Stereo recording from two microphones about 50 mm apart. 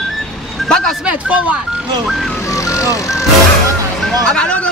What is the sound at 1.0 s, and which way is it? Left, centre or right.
Speech, right.